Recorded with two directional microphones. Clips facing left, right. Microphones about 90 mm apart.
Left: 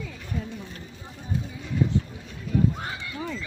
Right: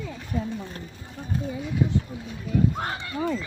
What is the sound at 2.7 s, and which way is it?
Horse, 55° right (ahead or behind).